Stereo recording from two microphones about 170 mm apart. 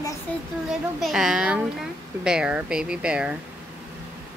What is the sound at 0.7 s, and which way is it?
Speech, centre (ahead or behind).